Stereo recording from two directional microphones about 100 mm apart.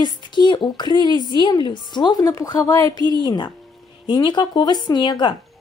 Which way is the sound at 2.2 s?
35° left (ahead or behind).